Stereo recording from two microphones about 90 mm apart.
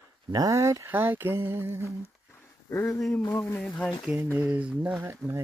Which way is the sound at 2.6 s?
35° left (ahead or behind).